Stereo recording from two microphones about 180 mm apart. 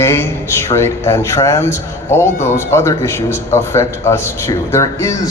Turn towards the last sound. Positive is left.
turn(degrees=15)  # may be behind; listen again after turning